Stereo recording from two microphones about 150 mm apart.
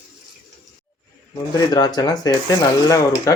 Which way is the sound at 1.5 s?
25° left (ahead or behind).